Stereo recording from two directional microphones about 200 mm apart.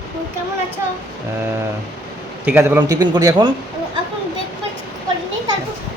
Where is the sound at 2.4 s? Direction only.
10° right (ahead or behind).